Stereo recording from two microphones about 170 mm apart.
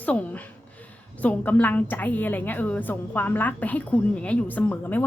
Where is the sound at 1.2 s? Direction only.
10° left (ahead or behind).